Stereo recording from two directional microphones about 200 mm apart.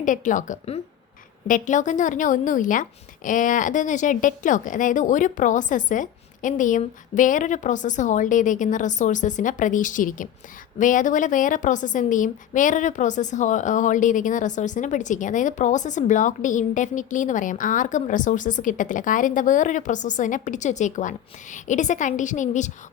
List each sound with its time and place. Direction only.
0.0 s a woman's voice: 40° left (ahead or behind)